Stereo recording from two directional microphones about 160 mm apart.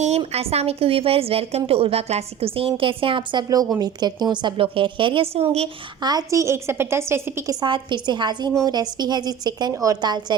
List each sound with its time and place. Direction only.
0.2 s a woman's voice: 40° right (ahead or behind)
6.0 s a woman's voice: 25° right (ahead or behind)
7.6 s a woman's voice: 30° right (ahead or behind)